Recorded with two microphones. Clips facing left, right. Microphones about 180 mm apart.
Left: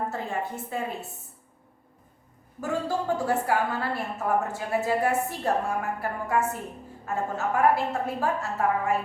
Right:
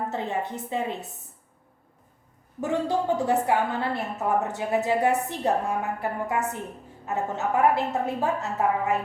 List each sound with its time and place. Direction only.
0.1 s a woman's voice: 20° right (ahead or behind)
2.6 s a woman's voice: 20° right (ahead or behind)